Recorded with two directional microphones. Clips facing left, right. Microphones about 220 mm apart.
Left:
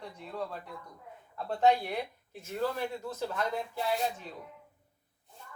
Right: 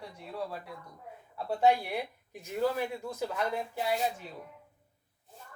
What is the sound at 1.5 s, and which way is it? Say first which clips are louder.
Speech: even; 10° right (ahead or behind).